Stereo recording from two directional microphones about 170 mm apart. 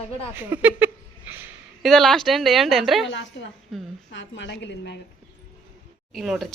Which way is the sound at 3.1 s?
90° left.